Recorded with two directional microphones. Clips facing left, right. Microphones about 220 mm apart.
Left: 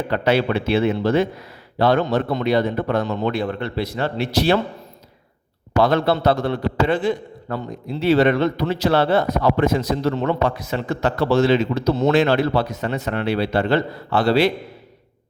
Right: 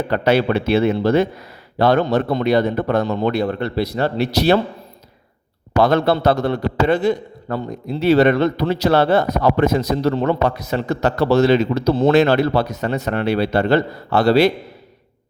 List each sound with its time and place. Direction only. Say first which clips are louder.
0.1 s a man's voice: right 2 dB; 45° right (ahead or behind)
5.7 s a man's voice: right 2 dB; 45° right (ahead or behind)